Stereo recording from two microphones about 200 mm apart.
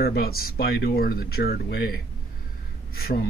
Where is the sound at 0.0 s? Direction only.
50° left (ahead or behind).